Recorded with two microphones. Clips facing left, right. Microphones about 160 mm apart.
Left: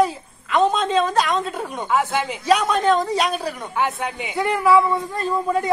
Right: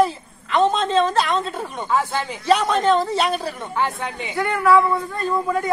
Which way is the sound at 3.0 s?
15° left (ahead or behind).